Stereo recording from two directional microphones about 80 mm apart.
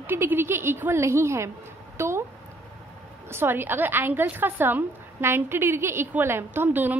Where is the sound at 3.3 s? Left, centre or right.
Right.